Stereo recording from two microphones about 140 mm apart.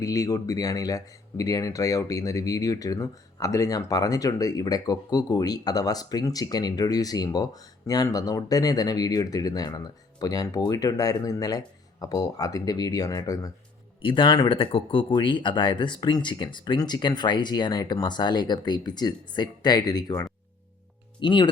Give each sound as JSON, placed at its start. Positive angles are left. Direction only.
{"t": 0.0, "sound": "speech", "side_deg": 25}
{"t": 14.0, "sound": "speech", "side_deg": 35}